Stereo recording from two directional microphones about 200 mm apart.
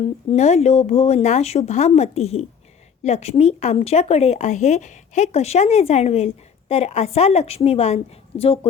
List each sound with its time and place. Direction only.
0.0 s speech: 30° left (ahead or behind)